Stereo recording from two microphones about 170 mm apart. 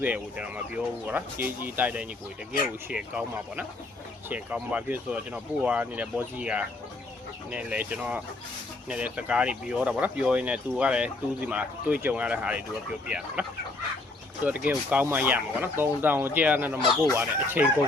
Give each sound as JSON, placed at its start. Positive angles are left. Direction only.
{"t": 0.0, "sound": "speech", "side_deg": -10}
{"t": 14.4, "sound": "speech", "side_deg": -10}